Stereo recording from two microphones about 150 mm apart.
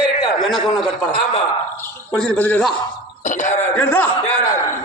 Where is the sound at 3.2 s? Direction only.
55° left (ahead or behind).